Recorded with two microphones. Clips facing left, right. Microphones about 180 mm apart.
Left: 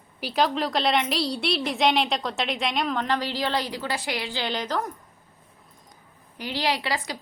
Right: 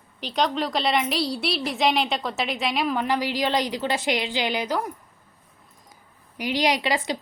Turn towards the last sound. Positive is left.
turn(degrees=-20)  # may be behind; listen again after turning